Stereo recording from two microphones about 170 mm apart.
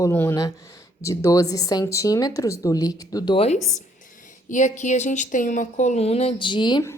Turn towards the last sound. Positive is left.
turn(degrees=25)  # may be behind; listen again after turning